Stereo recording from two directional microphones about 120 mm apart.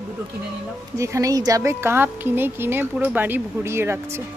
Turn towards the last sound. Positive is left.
turn(degrees=-20)  # may be behind; listen again after turning